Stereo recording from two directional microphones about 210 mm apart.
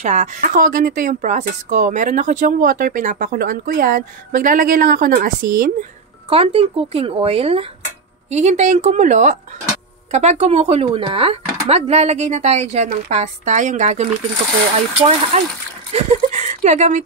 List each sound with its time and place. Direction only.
0.0 s speech: 35° right (ahead or behind)
6.3 s speech: 25° right (ahead or behind)